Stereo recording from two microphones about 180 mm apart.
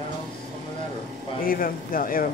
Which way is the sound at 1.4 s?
50° left (ahead or behind).